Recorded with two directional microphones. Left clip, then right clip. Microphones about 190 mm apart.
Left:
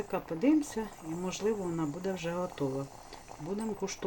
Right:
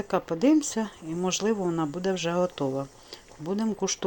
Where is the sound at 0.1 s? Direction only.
20° right (ahead or behind).